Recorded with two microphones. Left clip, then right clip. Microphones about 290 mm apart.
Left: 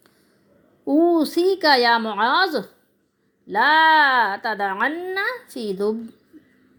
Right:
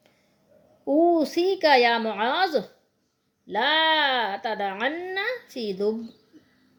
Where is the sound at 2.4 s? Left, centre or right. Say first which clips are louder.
Left 3 dB; centre.